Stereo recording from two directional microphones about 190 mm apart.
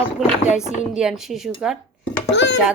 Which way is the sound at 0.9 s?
5° right (ahead or behind).